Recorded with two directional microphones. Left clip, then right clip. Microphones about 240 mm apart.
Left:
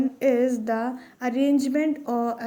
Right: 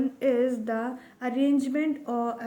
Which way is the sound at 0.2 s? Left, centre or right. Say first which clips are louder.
Left 3 dB; centre.